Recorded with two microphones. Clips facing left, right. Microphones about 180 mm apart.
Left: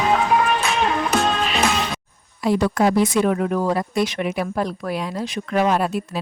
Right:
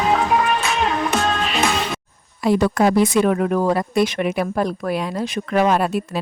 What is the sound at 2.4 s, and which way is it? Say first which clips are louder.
A woman's voice: right 2 dB; 55° right (ahead or behind).